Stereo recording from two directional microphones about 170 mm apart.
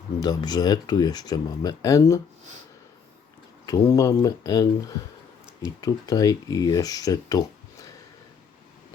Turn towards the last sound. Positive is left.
turn(degrees=20)  # may be behind; listen again after turning